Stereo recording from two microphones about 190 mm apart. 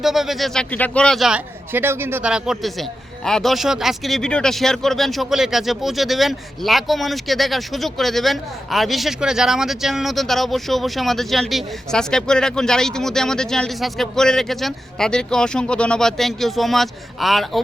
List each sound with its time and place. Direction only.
0.0 s speech: centre (ahead or behind)